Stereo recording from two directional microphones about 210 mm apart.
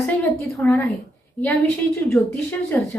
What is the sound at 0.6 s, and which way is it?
Speech, 10° left (ahead or behind).